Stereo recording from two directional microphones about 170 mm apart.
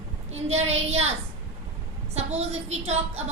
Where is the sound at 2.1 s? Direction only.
40° right (ahead or behind).